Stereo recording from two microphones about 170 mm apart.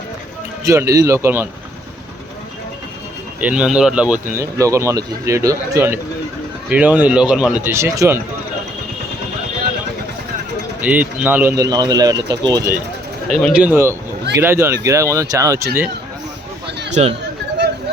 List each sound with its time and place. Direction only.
0.6 s speech: 20° right (ahead or behind)
3.4 s speech: 5° right (ahead or behind)
4.4 s speech: 15° right (ahead or behind)
10.8 s speech: 10° right (ahead or behind)
11.5 s speech: 20° right (ahead or behind)
13.3 s speech: centre (ahead or behind)
16.9 s speech: 35° right (ahead or behind)